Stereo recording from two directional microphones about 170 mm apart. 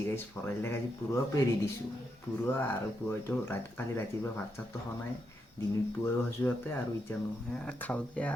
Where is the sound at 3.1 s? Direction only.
15° left (ahead or behind).